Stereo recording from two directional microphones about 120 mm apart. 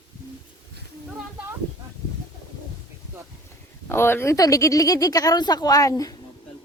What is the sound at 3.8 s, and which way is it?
Speech, 20° left (ahead or behind).